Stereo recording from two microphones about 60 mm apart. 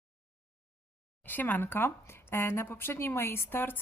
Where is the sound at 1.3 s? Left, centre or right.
Left.